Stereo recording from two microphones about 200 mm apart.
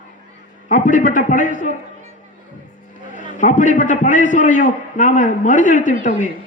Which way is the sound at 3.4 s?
40° left (ahead or behind).